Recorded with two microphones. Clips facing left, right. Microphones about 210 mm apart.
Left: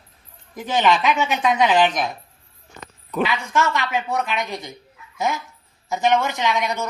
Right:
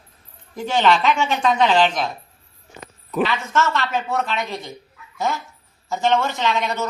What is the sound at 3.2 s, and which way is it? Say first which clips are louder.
Speech: right 1 dB; 15° left (ahead or behind).